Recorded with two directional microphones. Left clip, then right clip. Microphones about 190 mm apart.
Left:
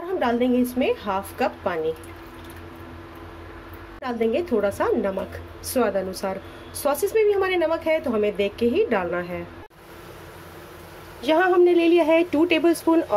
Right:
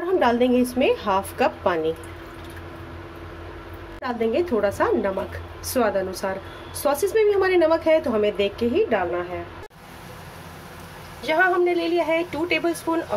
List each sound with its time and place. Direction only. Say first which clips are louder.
0.2 s speech: right 1 dB; 5° right (ahead or behind)
4.0 s a woman's voice: right 1 dB; 10° left (ahead or behind)
11.2 s speech: left 2 dB; 20° left (ahead or behind)